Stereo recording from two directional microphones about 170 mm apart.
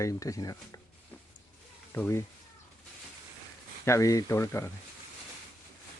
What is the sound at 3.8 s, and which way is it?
Speech, 15° left (ahead or behind).